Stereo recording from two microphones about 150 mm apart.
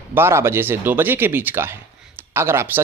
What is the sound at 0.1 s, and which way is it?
A man's voice, 15° right (ahead or behind).